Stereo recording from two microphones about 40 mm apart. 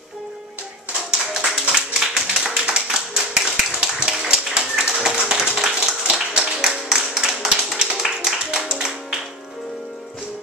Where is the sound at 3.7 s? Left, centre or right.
Right.